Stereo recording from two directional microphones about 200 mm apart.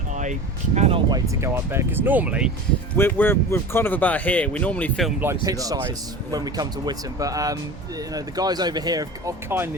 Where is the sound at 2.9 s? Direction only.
10° left (ahead or behind).